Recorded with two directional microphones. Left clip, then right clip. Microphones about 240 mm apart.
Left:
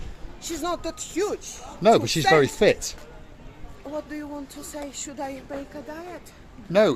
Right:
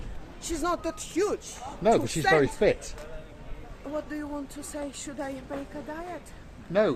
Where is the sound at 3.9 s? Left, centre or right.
Centre.